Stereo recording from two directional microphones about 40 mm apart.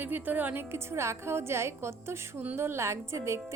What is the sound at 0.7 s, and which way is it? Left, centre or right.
A woman's voice, right.